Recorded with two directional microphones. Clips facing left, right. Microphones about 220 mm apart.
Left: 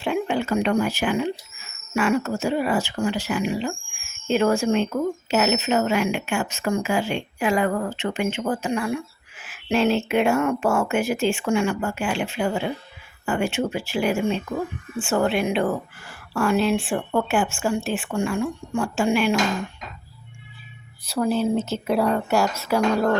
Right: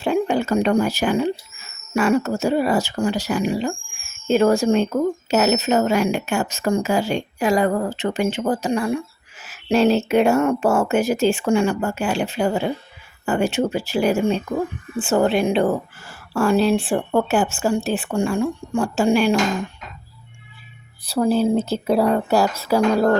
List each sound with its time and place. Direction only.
0.0 s speech: 40° right (ahead or behind)
21.0 s speech: 35° right (ahead or behind)